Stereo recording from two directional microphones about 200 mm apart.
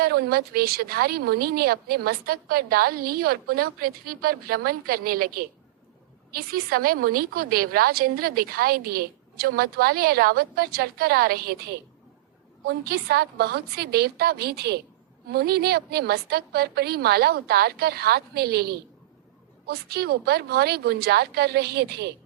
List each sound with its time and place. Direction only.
0.0 s a woman's voice: 50° right (ahead or behind)